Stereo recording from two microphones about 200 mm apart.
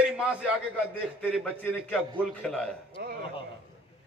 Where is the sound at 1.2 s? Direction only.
10° left (ahead or behind).